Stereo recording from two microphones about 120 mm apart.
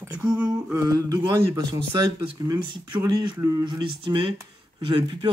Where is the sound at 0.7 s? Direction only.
30° right (ahead or behind).